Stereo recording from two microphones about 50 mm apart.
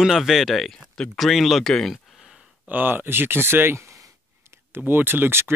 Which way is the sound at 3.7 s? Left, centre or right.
Right.